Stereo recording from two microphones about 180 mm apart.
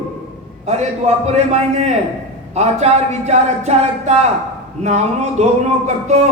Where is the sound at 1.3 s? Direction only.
40° right (ahead or behind).